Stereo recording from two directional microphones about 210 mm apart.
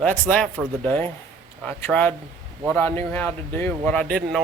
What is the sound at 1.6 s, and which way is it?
Speech, 10° left (ahead or behind).